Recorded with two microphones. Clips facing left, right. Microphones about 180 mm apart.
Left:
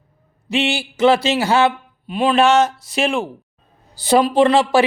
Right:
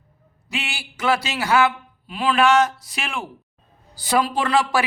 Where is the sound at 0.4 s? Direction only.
25° left (ahead or behind).